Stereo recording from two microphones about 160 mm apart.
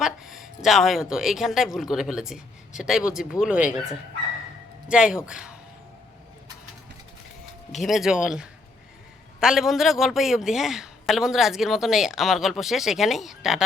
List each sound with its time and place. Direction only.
0.0 s a man's voice: centre (ahead or behind)
4.9 s a man's voice: 5° right (ahead or behind)
7.8 s a man's voice: centre (ahead or behind)